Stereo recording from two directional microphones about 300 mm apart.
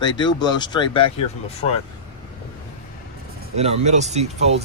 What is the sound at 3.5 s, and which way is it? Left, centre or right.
Speech, right.